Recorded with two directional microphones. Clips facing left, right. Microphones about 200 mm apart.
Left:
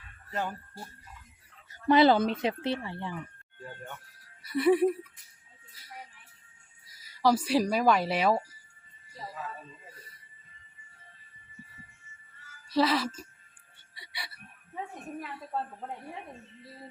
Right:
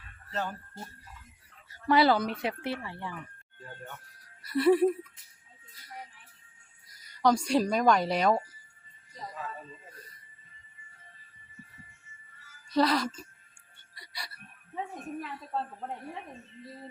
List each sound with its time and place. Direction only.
0.3 s speech: 15° left (ahead or behind)
1.7 s speech: 20° left (ahead or behind)
4.4 s speech: centre (ahead or behind)
6.8 s a woman's voice: centre (ahead or behind)
12.7 s speech: centre (ahead or behind)
13.9 s music: centre (ahead or behind)